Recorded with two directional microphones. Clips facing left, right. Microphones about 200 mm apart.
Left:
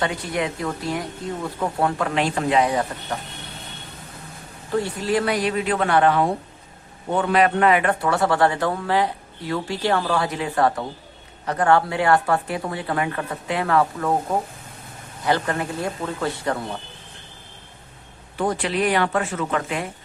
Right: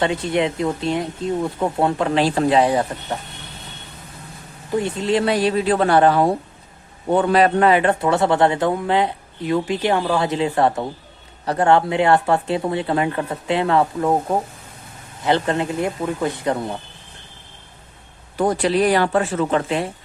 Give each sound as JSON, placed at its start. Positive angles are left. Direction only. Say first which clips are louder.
{"t": 0.0, "sound": "a man's voice", "louder": "right 5 dB", "side_deg": -25}
{"t": 4.7, "sound": "a man's voice", "louder": "right 2 dB", "side_deg": -20}
{"t": 18.3, "sound": "speech", "louder": "right 5 dB", "side_deg": -40}